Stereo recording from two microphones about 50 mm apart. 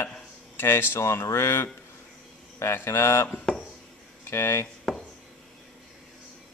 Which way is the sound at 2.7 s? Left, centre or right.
Left.